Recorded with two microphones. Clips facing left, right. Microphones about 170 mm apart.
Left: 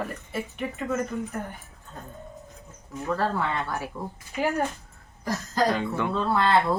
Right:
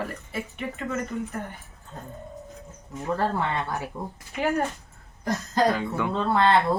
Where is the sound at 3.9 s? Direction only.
25° right (ahead or behind).